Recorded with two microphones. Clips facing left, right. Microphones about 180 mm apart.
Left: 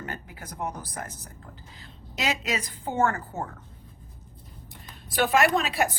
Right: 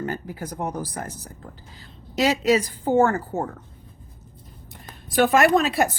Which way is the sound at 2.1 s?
35° right (ahead or behind).